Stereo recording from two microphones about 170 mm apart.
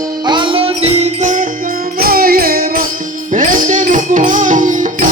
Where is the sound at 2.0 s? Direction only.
60° right (ahead or behind).